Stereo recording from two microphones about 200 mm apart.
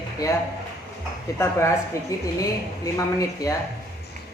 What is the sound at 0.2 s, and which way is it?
Speech, 15° left (ahead or behind).